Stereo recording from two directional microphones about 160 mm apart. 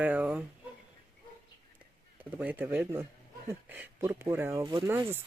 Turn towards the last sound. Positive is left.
turn(degrees=-15)  # may be behind; listen again after turning